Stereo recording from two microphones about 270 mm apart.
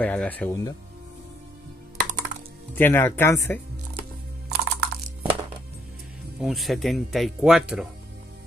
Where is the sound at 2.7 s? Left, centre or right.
Centre.